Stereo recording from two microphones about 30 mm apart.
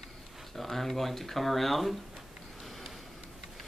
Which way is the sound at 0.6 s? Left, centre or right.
Centre.